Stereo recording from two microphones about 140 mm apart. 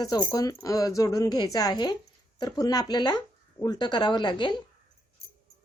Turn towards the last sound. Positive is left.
turn(degrees=35)  # may be behind; listen again after turning